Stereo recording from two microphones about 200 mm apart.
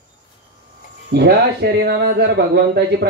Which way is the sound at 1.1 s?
55° right (ahead or behind).